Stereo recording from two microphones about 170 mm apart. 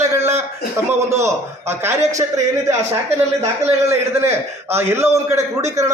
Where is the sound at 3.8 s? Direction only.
15° right (ahead or behind).